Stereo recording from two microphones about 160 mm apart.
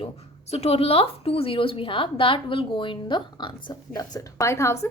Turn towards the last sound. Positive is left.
turn(degrees=15)  # may be behind; listen again after turning